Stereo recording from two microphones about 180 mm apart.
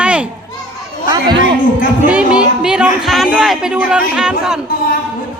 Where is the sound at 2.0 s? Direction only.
5° right (ahead or behind).